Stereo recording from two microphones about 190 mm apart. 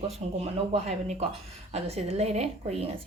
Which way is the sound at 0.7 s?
35° right (ahead or behind).